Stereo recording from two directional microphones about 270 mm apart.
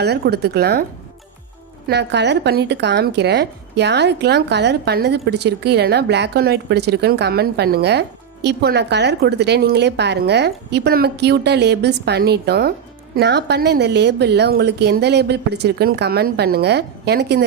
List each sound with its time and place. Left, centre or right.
0.0 s speech: right
1.9 s speech: right